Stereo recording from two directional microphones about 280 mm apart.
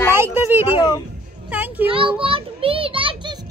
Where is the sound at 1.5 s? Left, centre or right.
Centre.